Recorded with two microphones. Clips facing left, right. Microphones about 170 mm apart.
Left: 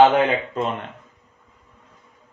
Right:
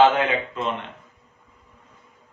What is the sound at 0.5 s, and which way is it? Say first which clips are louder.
Speech: left 3 dB; 40° left (ahead or behind).